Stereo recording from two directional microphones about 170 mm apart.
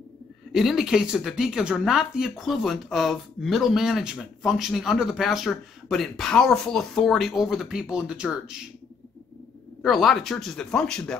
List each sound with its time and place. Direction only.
0.5 s speech: centre (ahead or behind)
9.8 s speech: centre (ahead or behind)